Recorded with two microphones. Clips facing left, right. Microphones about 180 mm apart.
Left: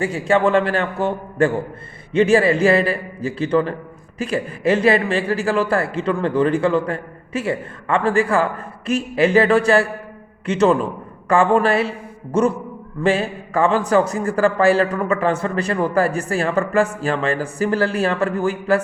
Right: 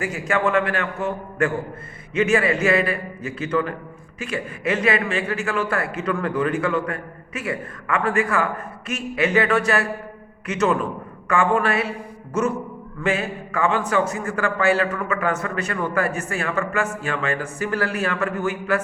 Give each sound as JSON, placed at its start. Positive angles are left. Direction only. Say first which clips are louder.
{"t": 0.0, "sound": "a man's voice", "louder": "left 5 dB", "side_deg": 30}